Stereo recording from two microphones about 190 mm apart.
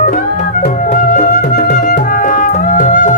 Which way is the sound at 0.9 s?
50° left (ahead or behind).